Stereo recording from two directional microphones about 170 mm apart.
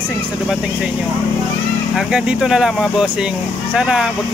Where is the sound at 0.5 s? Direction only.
5° right (ahead or behind).